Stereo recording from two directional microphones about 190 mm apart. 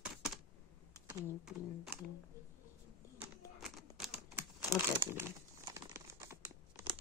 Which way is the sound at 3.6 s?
Centre (ahead or behind).